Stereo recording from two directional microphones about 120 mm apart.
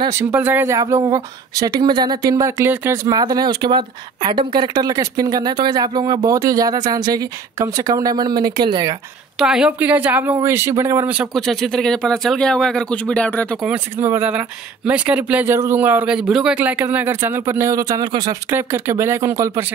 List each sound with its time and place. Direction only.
0.2 s speech: 15° right (ahead or behind)
0.7 s speech: 25° right (ahead or behind)
3.1 s speech: 35° right (ahead or behind)
9.4 s speech: 5° right (ahead or behind); by 11.1 s 25° right (ahead or behind)
11.3 s speech: centre (ahead or behind)
13.9 s speech: 20° right (ahead or behind); by 18.3 s 35° right (ahead or behind)
18.5 s speech: 20° right (ahead or behind)